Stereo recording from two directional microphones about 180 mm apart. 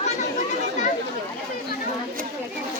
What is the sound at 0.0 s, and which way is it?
Children playing, 40° left (ahead or behind).